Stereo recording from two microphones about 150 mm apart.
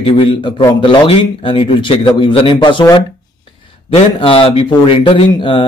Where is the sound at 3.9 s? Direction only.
35° left (ahead or behind).